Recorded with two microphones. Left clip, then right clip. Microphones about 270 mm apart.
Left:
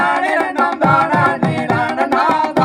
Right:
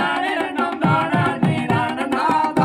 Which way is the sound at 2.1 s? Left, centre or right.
Centre.